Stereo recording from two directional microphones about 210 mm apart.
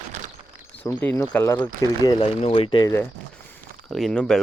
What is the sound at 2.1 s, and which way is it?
Speech, 30° left (ahead or behind).